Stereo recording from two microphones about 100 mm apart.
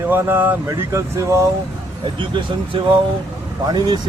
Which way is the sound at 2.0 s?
60° right (ahead or behind).